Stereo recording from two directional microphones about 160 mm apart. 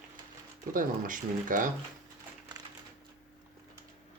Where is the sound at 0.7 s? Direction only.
60° right (ahead or behind).